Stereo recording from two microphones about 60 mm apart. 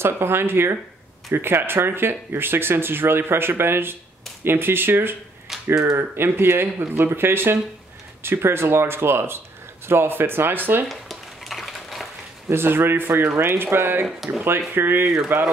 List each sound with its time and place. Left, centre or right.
0.0 s speech: right
5.5 s finger snapping: centre
5.9 s speech: right
10.9 s a sound: centre
12.4 s speech: right
14.0 s speech: centre
14.7 s speech: right